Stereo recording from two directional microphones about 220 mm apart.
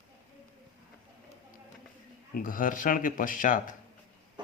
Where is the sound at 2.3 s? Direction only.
40° left (ahead or behind).